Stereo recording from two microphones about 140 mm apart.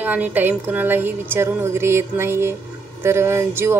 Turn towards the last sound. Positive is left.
turn(degrees=-20)  # may be behind; listen again after turning